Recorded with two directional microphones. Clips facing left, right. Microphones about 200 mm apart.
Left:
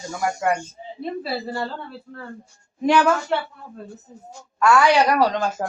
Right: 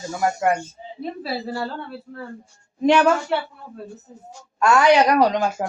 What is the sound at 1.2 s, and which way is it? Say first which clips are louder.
Speech: right 3 dB; centre (ahead or behind).